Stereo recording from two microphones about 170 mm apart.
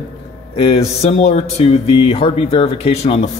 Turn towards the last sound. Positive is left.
turn(degrees=35)  # may be behind; listen again after turning